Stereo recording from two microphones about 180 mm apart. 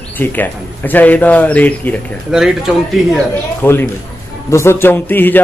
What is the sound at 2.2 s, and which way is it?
Speech, centre (ahead or behind).